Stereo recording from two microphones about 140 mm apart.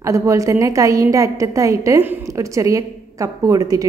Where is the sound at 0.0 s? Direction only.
20° right (ahead or behind).